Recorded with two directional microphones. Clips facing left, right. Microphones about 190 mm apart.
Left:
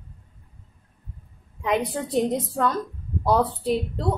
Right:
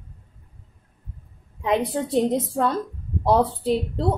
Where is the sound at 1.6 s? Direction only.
25° right (ahead or behind).